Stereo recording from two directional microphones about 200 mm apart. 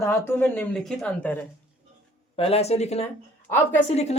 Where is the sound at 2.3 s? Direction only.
30° left (ahead or behind).